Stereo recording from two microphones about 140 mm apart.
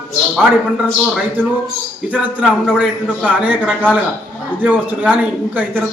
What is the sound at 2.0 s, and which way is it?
A man's voice, 5° right (ahead or behind).